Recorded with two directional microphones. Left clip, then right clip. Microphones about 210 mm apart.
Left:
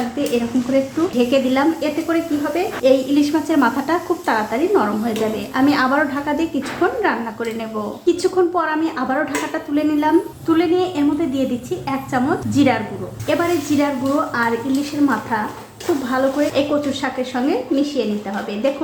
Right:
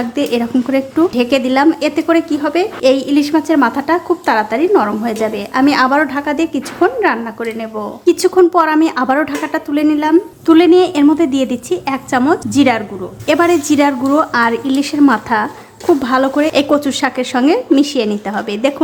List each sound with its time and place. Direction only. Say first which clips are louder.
0.2 s a woman's voice: right 5 dB; 35° right (ahead or behind)
10.4 s speech: right 13 dB; 40° right (ahead or behind)